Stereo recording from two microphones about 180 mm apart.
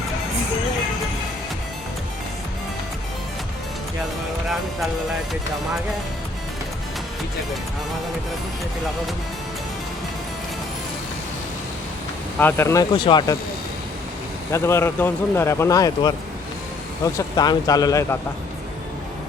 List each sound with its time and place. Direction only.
12.4 s speech: 10° left (ahead or behind)
14.5 s speech: 15° left (ahead or behind)
17.2 s speech: 20° left (ahead or behind)